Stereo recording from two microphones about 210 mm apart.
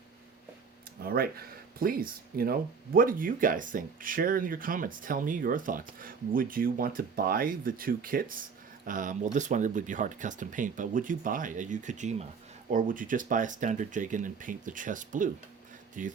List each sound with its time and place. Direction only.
1.0 s speech: 45° right (ahead or behind)